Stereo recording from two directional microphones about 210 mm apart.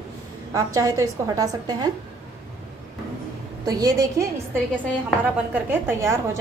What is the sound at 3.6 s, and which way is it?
Speech, 15° right (ahead or behind).